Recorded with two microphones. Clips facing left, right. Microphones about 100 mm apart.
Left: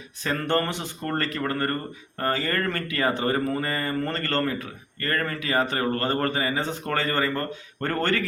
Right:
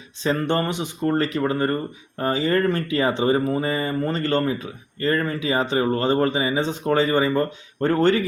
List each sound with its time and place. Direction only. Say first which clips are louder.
0.2 s speech: right 3 dB; 20° right (ahead or behind)